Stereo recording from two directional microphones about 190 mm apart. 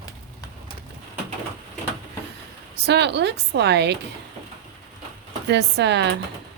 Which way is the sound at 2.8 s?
65° right (ahead or behind).